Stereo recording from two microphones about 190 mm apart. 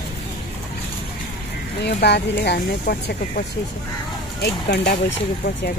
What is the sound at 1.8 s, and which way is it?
Speech, 60° left (ahead or behind).